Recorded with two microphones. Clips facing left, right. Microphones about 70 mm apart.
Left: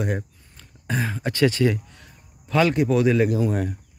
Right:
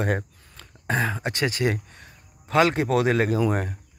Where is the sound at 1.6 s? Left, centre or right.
Right.